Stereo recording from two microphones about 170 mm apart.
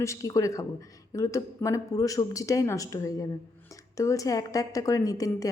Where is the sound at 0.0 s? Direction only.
20° left (ahead or behind).